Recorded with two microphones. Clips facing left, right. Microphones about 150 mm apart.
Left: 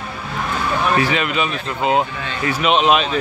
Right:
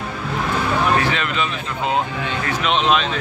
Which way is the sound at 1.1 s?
10° left (ahead or behind).